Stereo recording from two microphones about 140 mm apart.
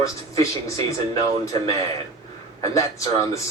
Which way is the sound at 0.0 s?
25° left (ahead or behind).